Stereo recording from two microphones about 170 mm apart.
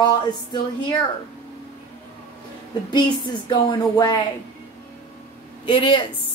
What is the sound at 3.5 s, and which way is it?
Speech, 25° left (ahead or behind).